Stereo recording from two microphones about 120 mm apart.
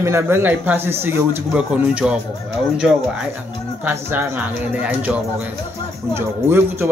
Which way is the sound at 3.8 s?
20° right (ahead or behind).